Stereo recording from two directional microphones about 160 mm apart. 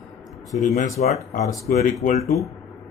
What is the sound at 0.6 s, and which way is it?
Speech, 45° left (ahead or behind).